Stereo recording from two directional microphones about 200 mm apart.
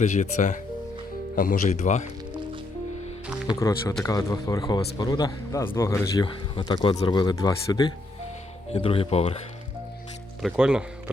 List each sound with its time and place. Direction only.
0.0 s speech: 35° left (ahead or behind)
3.5 s speech: 15° left (ahead or behind)
10.4 s speech: 5° right (ahead or behind)